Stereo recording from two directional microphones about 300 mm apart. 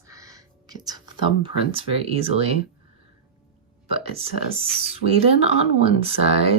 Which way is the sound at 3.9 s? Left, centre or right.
Centre.